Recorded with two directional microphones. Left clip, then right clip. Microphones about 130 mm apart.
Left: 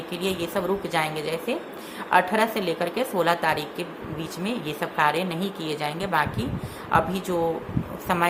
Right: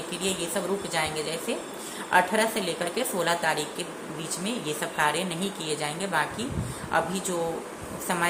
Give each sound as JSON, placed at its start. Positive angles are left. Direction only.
{"t": 0.2, "sound": "speech", "side_deg": 45}